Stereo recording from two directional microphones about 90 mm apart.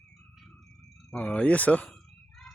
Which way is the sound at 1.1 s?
10° left (ahead or behind).